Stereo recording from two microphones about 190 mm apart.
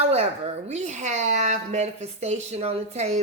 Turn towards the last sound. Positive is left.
turn(degrees=-35)  # may be behind; listen again after turning